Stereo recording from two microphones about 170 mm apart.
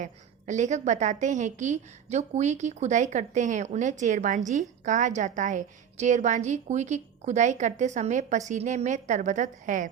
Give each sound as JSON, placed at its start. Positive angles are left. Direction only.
{"t": 0.0, "sound": "a woman's voice", "side_deg": -45}